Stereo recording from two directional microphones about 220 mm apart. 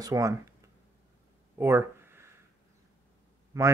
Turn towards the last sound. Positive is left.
turn(degrees=-15)  # may be behind; listen again after turning